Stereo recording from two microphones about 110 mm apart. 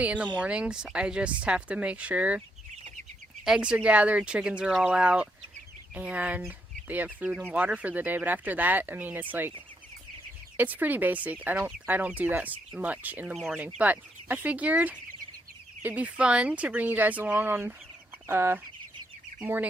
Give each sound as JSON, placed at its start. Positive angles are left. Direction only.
{"t": 0.0, "sound": "speech", "side_deg": -10}
{"t": 3.4, "sound": "speech", "side_deg": -5}
{"t": 10.6, "sound": "speech", "side_deg": -15}
{"t": 13.3, "sound": "speech", "side_deg": 0}
{"t": 13.7, "sound": "speech", "side_deg": -15}